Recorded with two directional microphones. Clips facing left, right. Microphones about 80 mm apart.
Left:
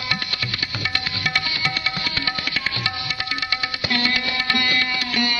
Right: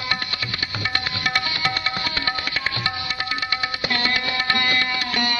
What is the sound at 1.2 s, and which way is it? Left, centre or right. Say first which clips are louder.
Music: right 1 dB; right.